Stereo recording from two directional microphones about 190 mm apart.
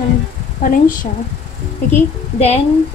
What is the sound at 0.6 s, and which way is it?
Speech, 45° left (ahead or behind).